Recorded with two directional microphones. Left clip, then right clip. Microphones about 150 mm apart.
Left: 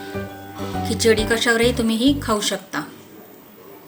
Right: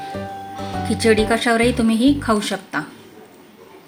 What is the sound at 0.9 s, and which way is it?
A woman's voice, 40° right (ahead or behind).